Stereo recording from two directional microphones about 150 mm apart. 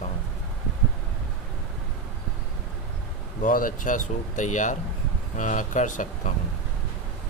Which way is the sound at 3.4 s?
65° left (ahead or behind).